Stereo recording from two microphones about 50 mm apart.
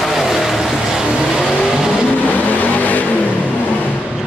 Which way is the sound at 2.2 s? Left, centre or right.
Left.